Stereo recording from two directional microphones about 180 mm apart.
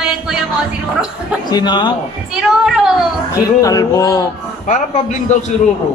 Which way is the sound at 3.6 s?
20° left (ahead or behind).